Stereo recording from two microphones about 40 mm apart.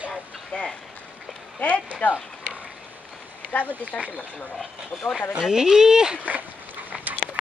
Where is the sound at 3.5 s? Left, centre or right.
Left.